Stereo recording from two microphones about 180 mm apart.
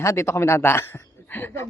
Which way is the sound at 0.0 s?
15° left (ahead or behind).